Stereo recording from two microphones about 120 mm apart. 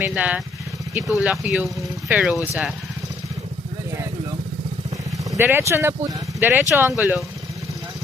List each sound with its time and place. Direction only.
0.1 s speech: 10° right (ahead or behind)
5.4 s speech: 20° right (ahead or behind)